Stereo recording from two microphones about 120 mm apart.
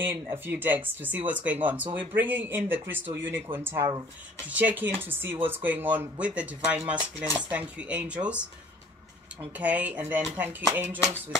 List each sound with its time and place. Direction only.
0.0 s speech: 20° right (ahead or behind)
4.5 s speech: 15° right (ahead or behind)